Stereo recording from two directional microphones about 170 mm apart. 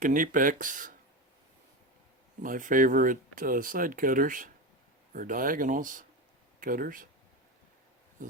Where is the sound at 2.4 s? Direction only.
50° right (ahead or behind).